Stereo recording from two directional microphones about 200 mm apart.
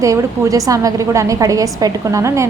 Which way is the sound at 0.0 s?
15° right (ahead or behind).